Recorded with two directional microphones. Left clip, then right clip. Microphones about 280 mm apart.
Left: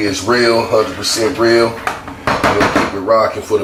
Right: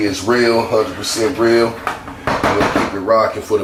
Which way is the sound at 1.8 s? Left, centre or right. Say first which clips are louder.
Left 3 dB; centre.